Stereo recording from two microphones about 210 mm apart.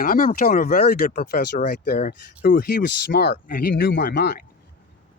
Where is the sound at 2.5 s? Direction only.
60° left (ahead or behind).